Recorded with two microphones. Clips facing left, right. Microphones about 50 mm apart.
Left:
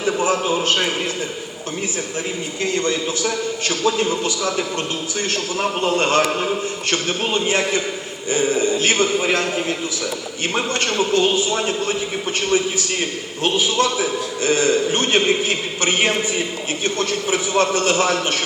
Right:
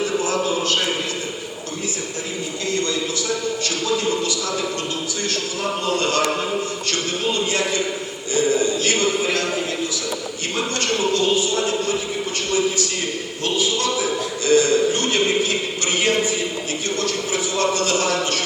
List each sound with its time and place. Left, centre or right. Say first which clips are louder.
0.2 s a sound: left 2 dB; left
2.7 s a man's voice: left 1 dB; left
5.8 s a man's voice: left 3 dB; left
10.5 s a man's voice: left 1 dB; left
13.4 s a man's voice: left 4 dB; left